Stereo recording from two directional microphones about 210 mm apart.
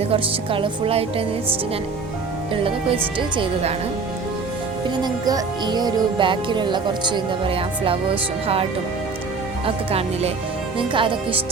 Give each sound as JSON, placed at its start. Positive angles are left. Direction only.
{"t": 0.0, "sound": "speech", "side_deg": -25}
{"t": 2.5, "sound": "speech", "side_deg": -25}
{"t": 5.0, "sound": "speech", "side_deg": -20}
{"t": 9.6, "sound": "speech", "side_deg": -30}